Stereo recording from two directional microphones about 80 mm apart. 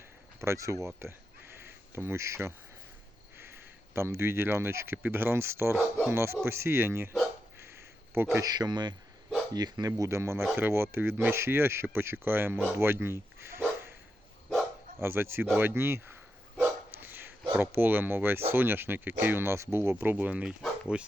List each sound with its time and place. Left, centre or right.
0.3 s speech: right
1.5 s insect: right
3.3 s speech: right
8.1 s speech: right
8.4 s speech: right
10.0 s speech: right
14.9 s speech: right
16.6 s dog: right
17.5 s speech: right